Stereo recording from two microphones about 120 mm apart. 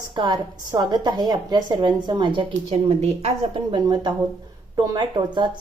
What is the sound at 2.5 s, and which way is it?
Speech, 70° right (ahead or behind).